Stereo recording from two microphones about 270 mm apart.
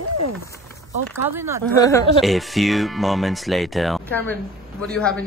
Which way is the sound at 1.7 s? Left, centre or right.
Centre.